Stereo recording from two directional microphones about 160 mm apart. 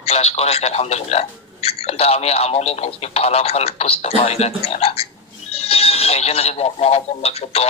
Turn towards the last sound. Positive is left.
turn(degrees=40)  # may be behind; listen again after turning